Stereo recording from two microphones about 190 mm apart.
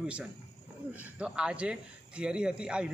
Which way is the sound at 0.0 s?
5° right (ahead or behind).